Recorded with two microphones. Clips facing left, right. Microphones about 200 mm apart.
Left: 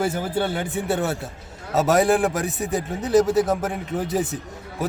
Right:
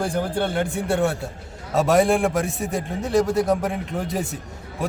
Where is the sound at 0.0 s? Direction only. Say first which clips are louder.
Even; 5° left (ahead or behind).